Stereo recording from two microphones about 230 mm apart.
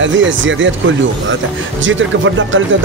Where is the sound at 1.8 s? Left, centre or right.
Right.